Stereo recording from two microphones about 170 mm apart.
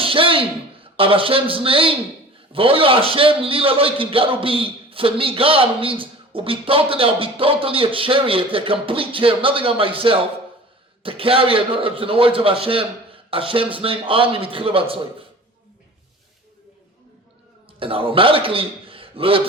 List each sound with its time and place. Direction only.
0.0 s a man's voice: 30° right (ahead or behind)
17.7 s a man's voice: 30° right (ahead or behind)